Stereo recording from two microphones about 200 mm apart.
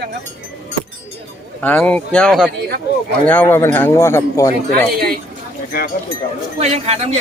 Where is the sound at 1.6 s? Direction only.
5° left (ahead or behind).